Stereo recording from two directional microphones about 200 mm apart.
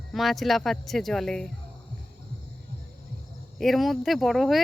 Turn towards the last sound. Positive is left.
turn(degrees=0)  # may be behind; listen again after turning